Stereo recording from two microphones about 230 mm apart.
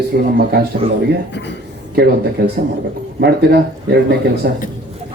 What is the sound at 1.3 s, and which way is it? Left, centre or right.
Speech, left.